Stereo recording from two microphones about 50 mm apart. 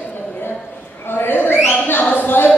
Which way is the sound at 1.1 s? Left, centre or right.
Left.